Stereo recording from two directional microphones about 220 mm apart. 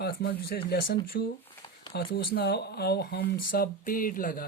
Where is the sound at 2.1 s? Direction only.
45° left (ahead or behind).